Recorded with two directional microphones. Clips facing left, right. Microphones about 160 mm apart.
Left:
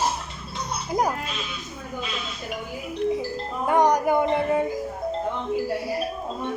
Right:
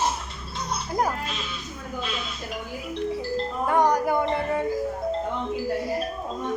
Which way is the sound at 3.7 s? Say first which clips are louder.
Left 2 dB; 20° left (ahead or behind).